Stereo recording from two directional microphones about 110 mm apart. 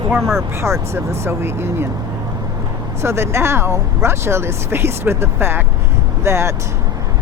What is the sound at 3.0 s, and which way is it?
Speech, 25° right (ahead or behind).